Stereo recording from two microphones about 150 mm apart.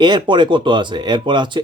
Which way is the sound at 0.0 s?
30° right (ahead or behind).